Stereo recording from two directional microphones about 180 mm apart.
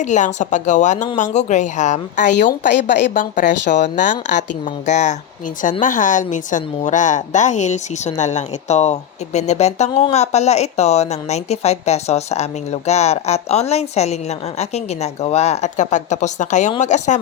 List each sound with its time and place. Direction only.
0.0 s a woman's voice: 40° left (ahead or behind)